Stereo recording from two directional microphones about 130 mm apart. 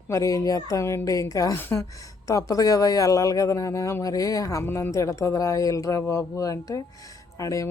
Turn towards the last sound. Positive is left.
turn(degrees=25)  # may be behind; listen again after turning